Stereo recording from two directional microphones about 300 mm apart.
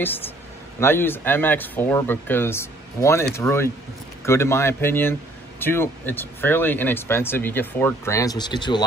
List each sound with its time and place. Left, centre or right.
0.7 s speech: centre